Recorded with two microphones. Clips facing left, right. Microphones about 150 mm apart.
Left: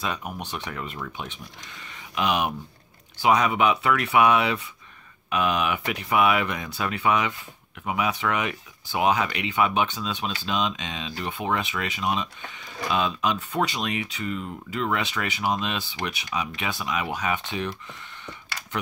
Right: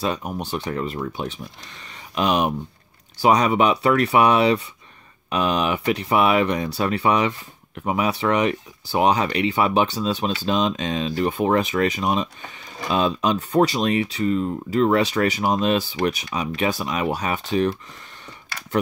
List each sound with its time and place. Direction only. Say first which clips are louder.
0.0 s speech: right 6 dB; 35° right (ahead or behind)